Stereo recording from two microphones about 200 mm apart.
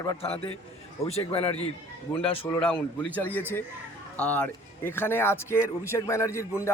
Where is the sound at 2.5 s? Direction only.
5° left (ahead or behind).